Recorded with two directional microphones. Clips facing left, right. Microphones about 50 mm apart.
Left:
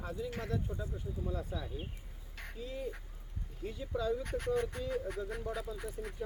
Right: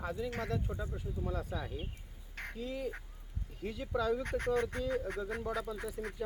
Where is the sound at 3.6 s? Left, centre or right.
Right.